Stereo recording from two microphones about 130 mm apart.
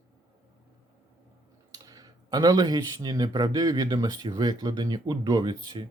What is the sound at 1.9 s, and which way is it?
Speech, 30° right (ahead or behind).